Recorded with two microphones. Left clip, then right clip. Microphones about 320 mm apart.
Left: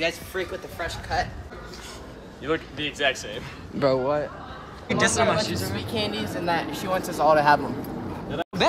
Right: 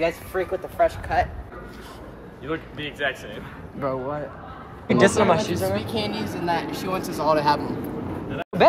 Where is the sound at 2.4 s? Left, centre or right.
Left.